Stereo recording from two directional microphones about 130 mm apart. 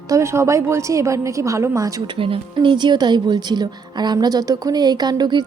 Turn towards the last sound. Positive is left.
turn(degrees=-35)  # may be behind; listen again after turning